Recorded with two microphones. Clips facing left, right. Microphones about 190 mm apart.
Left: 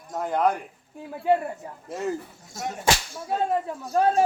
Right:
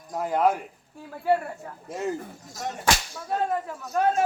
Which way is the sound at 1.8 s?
Centre (ahead or behind).